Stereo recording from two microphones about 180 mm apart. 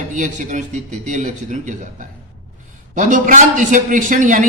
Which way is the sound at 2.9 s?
45° right (ahead or behind).